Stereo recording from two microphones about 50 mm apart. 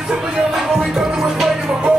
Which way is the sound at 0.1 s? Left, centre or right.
Centre.